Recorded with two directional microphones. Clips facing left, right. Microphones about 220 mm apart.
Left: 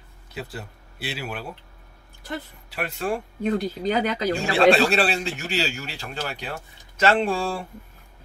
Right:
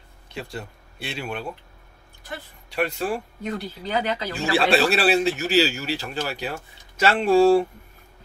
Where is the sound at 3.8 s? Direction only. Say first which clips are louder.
Left 3 dB; 45° left (ahead or behind).